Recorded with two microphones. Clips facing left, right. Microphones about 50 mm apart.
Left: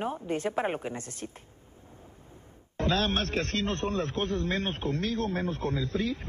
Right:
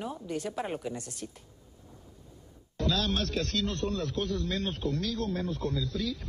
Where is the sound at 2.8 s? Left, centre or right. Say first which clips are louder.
Left 2 dB; left.